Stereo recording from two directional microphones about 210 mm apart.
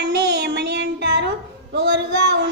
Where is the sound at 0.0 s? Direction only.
55° right (ahead or behind).